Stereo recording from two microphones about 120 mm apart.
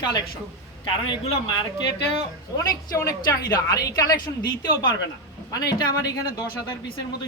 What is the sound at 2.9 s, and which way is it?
A woman's voice, 25° left (ahead or behind).